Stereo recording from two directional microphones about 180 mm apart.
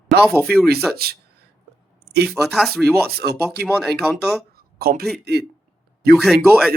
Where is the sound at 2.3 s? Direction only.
Centre (ahead or behind).